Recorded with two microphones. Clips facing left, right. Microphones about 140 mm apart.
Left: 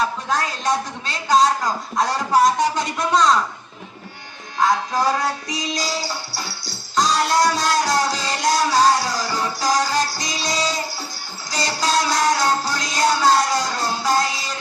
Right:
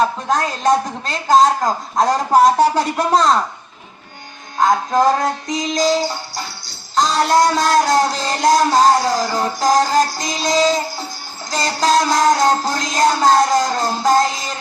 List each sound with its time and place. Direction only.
0.0 s music: 45° right (ahead or behind)
2.7 s speech: 35° right (ahead or behind)
4.6 s music: 45° right (ahead or behind)
5.7 s music: 25° right (ahead or behind)
7.0 s music: 50° right (ahead or behind)
10.5 s music: 25° right (ahead or behind)
11.5 s music: 50° right (ahead or behind)